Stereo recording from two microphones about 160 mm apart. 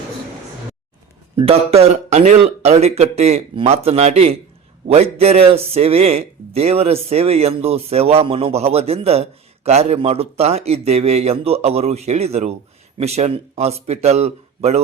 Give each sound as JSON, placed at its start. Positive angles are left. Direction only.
{"t": 1.4, "sound": "speech", "side_deg": -40}